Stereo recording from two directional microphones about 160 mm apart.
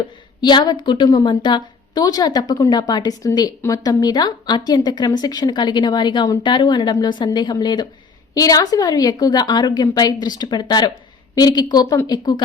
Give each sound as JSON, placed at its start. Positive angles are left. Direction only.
{"t": 0.4, "sound": "speech", "side_deg": 30}